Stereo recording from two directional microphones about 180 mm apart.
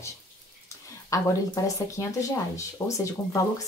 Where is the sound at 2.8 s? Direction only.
15° left (ahead or behind).